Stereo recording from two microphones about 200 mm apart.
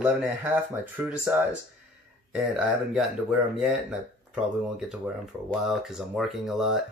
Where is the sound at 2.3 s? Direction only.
5° right (ahead or behind).